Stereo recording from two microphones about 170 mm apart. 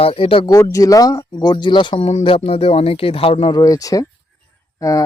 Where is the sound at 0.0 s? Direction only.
35° left (ahead or behind).